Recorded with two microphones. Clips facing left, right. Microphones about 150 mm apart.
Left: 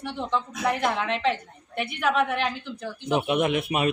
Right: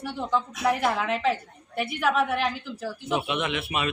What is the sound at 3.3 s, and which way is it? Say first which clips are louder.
Speech: left 5 dB; 45° left (ahead or behind).